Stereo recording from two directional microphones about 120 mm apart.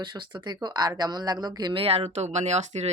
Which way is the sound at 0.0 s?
40° right (ahead or behind).